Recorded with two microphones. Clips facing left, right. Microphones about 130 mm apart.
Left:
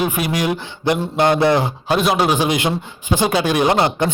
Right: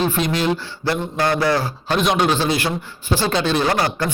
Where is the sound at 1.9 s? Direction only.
5° left (ahead or behind); by 4.1 s 20° left (ahead or behind).